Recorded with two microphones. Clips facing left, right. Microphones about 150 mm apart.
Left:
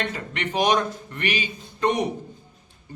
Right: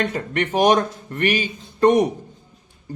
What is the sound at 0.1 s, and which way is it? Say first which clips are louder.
Speech: right 6 dB; 45° right (ahead or behind).